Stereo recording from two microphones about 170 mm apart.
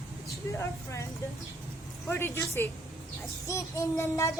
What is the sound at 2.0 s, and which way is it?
A child's voice, 15° left (ahead or behind).